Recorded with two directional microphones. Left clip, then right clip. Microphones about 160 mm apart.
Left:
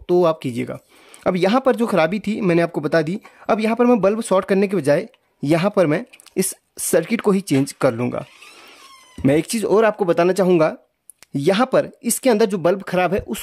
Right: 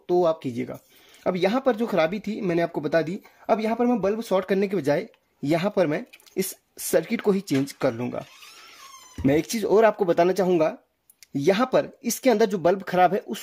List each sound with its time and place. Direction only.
0.0 s speech: 50° left (ahead or behind)
4.4 s speech: 35° left (ahead or behind)